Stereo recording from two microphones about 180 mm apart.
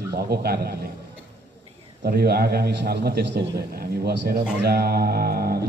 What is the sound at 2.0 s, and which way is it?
A man's voice, 60° right (ahead or behind).